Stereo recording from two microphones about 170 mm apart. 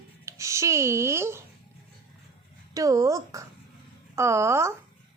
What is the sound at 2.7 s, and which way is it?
Speech, 20° right (ahead or behind).